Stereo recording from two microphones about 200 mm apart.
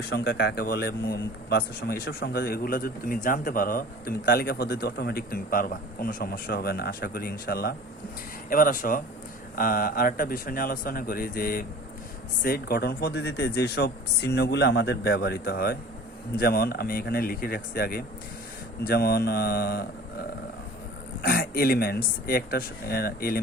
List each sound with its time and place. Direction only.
0.1 s a man's voice: 55° left (ahead or behind)